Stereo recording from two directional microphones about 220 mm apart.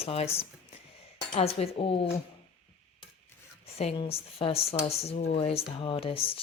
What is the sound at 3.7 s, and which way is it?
Speech, 25° left (ahead or behind).